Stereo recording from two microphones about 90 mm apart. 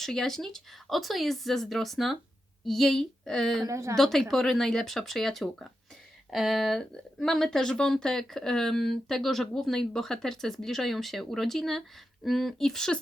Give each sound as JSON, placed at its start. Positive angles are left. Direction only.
{"t": 0.0, "sound": "speech", "side_deg": 5}
{"t": 3.7, "sound": "speech", "side_deg": -35}
{"t": 3.9, "sound": "speech", "side_deg": 0}